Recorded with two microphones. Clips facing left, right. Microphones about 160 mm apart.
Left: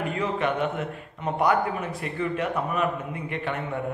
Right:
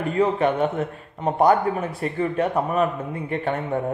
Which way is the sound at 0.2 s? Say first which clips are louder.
Right 7 dB; 40° right (ahead or behind).